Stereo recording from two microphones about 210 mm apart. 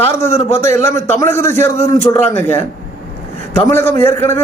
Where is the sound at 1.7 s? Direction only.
30° left (ahead or behind).